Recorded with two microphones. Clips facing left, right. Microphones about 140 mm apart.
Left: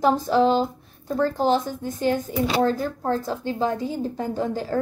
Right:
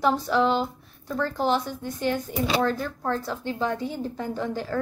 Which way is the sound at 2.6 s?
40° left (ahead or behind).